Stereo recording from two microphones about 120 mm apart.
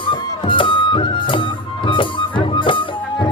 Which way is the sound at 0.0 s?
45° left (ahead or behind).